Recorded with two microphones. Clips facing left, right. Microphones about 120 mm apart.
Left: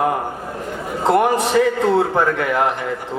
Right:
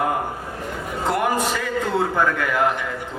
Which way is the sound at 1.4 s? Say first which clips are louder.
Left 8 dB; 30° left (ahead or behind).